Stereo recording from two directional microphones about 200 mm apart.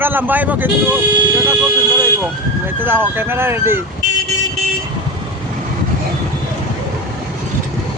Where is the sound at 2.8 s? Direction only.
10° right (ahead or behind).